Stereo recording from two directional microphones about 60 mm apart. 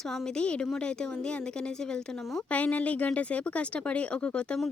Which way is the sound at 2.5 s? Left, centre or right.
Left.